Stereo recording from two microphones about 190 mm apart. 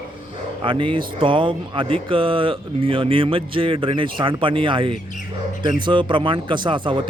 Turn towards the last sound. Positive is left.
turn(degrees=-25)  # may be behind; listen again after turning